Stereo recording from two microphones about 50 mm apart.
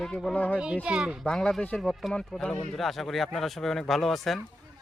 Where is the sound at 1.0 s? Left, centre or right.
Centre.